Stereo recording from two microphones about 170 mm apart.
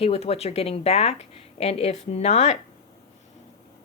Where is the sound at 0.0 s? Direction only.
35° left (ahead or behind).